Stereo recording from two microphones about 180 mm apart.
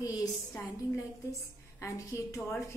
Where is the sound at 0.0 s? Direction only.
20° left (ahead or behind).